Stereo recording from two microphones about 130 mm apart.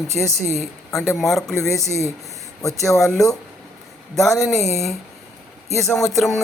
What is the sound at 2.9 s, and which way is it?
Speech, centre (ahead or behind).